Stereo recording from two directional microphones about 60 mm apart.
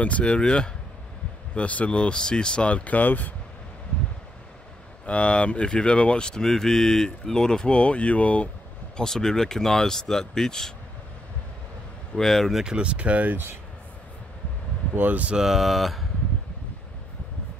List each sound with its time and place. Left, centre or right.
0.0 s speech: left
5.0 s speech: left
8.9 s speech: centre
12.2 s a sound: centre
12.6 s speech: centre
15.0 s speech: right
15.3 s a sound: centre